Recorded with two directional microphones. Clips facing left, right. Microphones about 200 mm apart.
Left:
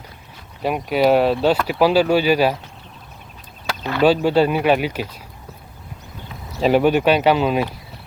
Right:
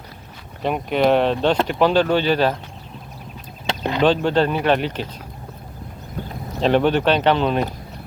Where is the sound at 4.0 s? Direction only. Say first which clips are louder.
Left 3 dB; 10° left (ahead or behind).